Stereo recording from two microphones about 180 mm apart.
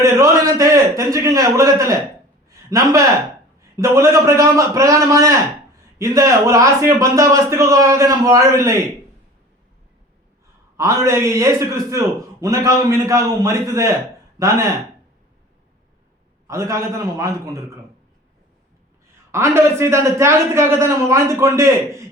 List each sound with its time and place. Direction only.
0.0 s a man's voice: 15° right (ahead or behind)
10.8 s a man's voice: 15° right (ahead or behind)
16.5 s a man's voice: 15° right (ahead or behind)
19.3 s a man's voice: 15° right (ahead or behind)